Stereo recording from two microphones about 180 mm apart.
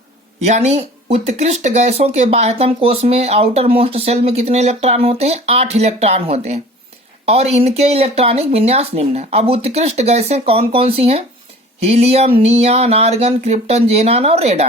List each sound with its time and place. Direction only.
0.4 s speech: 40° right (ahead or behind)